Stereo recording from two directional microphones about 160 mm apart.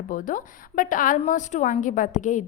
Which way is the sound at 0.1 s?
55° left (ahead or behind).